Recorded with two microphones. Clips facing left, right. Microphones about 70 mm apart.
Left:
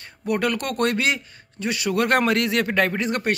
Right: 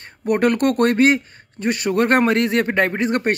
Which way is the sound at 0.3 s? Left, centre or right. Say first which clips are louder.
Right 7 dB; right.